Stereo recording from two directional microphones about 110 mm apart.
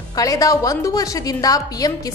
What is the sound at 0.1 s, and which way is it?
A woman's voice, 30° left (ahead or behind).